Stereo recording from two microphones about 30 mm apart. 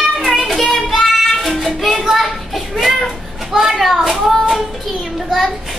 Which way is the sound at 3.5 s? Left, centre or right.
Centre.